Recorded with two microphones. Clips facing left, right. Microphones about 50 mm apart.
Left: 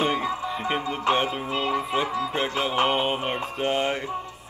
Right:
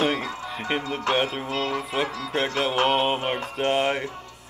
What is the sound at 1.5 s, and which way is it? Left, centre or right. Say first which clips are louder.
Speech: left 1 dB; centre.